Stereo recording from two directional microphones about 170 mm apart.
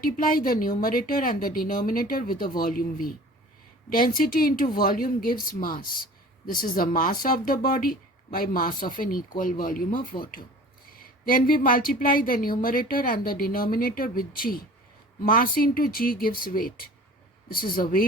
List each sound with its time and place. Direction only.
0.0 s a woman's voice: 55° left (ahead or behind)
17.7 s a woman's voice: 60° left (ahead or behind)